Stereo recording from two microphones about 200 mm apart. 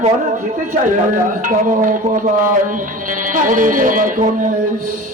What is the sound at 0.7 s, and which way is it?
Speech, 40° right (ahead or behind).